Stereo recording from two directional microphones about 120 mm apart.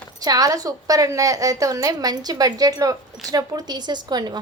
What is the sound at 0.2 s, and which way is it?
A woman's voice, 30° right (ahead or behind).